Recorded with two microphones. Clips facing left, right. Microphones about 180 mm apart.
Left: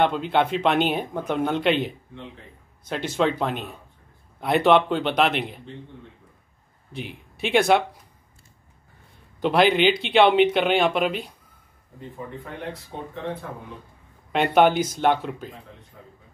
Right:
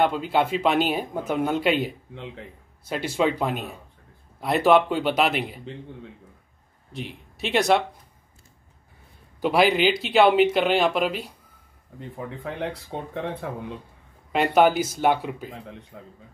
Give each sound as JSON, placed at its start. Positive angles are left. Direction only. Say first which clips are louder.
{"t": 0.0, "sound": "speech", "louder": "left 1 dB", "side_deg": -5}
{"t": 6.9, "sound": "speech", "louder": "even", "side_deg": 0}
{"t": 9.4, "sound": "speech", "louder": "left 1 dB", "side_deg": -5}
{"t": 13.4, "sound": "a man's voice", "louder": "right 4 dB", "side_deg": -90}
{"t": 14.3, "sound": "speech", "louder": "left 1 dB", "side_deg": -5}
{"t": 15.9, "sound": "speech", "louder": "right 4 dB", "side_deg": -80}